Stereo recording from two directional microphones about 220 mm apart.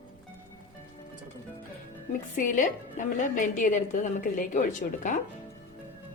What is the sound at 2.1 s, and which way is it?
A woman's voice, 35° left (ahead or behind).